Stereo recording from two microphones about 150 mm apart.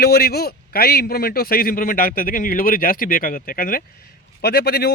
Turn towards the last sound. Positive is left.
turn(degrees=90)